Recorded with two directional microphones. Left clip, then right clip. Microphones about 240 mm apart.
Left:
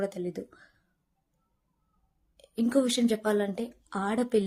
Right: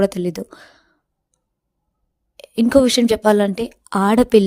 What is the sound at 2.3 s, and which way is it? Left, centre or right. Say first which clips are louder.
A woman's voice: right 13 dB; right.